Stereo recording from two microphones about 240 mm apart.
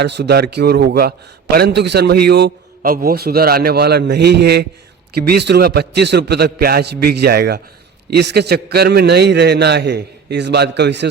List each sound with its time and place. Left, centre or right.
0.0 s a man's voice: right